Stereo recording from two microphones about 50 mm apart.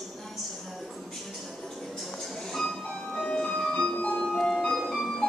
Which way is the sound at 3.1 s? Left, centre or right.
Left.